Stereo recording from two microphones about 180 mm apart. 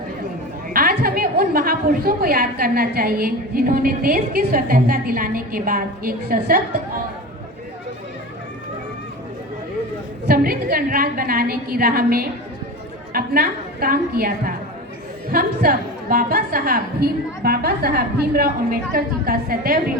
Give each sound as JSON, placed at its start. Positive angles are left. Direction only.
{"t": 0.7, "sound": "a woman's voice", "side_deg": -55}
{"t": 10.2, "sound": "a woman's voice", "side_deg": -55}